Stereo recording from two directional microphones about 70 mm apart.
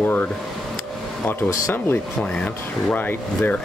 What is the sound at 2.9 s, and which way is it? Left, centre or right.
Speech, left.